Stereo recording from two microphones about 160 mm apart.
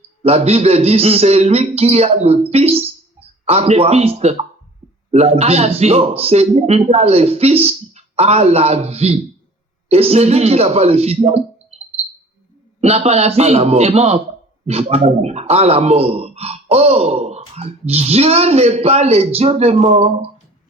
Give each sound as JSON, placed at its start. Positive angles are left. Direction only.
{"t": 0.2, "sound": "speech", "side_deg": -40}
{"t": 12.8, "sound": "speech", "side_deg": -40}